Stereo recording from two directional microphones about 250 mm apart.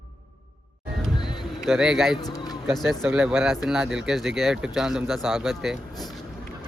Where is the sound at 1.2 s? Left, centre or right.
Centre.